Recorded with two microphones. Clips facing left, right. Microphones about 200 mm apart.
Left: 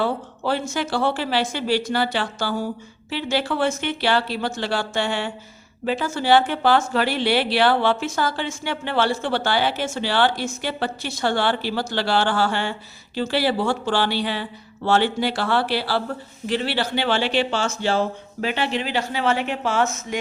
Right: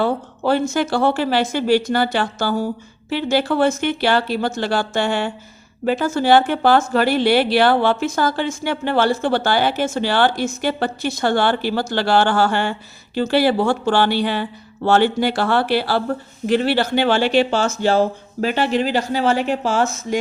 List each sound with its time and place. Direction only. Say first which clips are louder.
0.0 s a woman's voice: right 4 dB; 50° right (ahead or behind)